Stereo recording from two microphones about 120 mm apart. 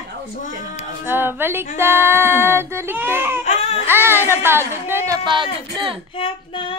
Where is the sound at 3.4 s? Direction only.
70° left (ahead or behind).